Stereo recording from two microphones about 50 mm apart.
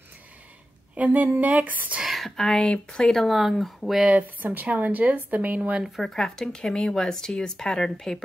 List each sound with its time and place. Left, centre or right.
0.9 s speech: right
2.0 s speech: centre
3.3 s speech: centre
4.0 s speech: right
5.9 s speech: centre